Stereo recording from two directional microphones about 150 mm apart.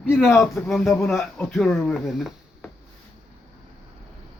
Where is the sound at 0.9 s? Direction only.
15° left (ahead or behind); by 2.7 s centre (ahead or behind).